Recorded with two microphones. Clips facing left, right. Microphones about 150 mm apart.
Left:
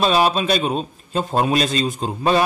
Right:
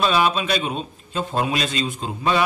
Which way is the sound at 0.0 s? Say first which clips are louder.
Left 2 dB; 35° left (ahead or behind).